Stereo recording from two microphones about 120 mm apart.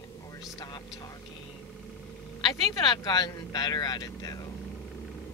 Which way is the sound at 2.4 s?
35° left (ahead or behind).